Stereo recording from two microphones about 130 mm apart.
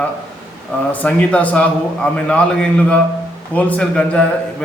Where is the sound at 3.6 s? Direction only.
10° left (ahead or behind).